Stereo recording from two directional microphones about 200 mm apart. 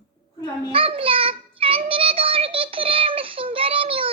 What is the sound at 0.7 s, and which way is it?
Child singing, 30° right (ahead or behind).